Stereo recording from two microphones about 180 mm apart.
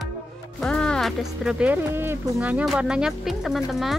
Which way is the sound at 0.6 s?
5° left (ahead or behind).